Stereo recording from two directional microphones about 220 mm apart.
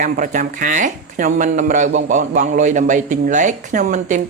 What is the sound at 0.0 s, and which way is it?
Speech, 35° right (ahead or behind).